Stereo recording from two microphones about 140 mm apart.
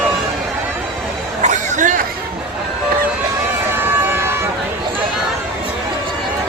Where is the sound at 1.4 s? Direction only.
60° right (ahead or behind).